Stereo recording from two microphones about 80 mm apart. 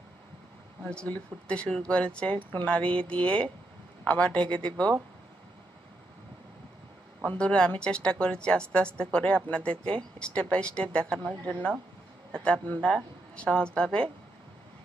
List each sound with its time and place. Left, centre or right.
0.8 s speech: centre
7.2 s a man's voice: centre
12.6 s speech: left